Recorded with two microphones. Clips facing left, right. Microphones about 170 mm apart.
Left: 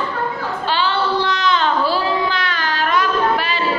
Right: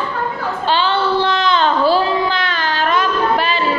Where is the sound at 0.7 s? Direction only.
30° right (ahead or behind).